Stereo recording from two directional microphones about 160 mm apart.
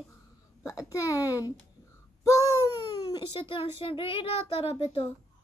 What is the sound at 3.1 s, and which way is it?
A child's voice, 35° left (ahead or behind).